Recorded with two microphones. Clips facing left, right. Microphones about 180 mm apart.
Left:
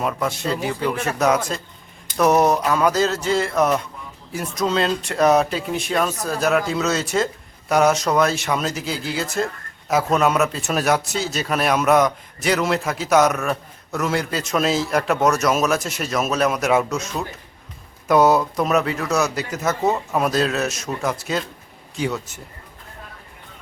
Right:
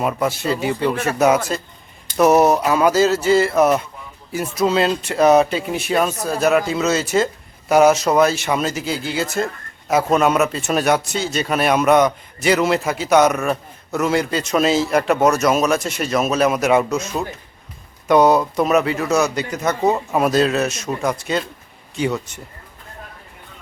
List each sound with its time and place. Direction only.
0.0 s speech: 5° right (ahead or behind)
19.8 s speech: 15° right (ahead or behind)
20.1 s speech: centre (ahead or behind)